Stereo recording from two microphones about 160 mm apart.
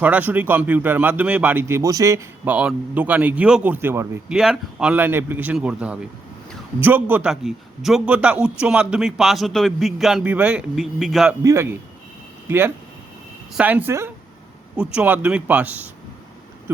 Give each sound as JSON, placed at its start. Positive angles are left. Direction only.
{"t": 0.0, "sound": "a man's voice", "side_deg": -10}
{"t": 11.4, "sound": "a man's voice", "side_deg": -15}
{"t": 16.7, "sound": "a sound", "side_deg": -15}